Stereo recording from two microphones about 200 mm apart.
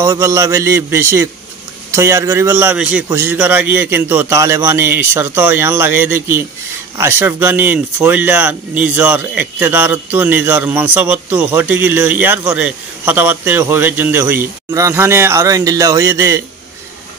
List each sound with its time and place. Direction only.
0.0 s speech: 15° right (ahead or behind)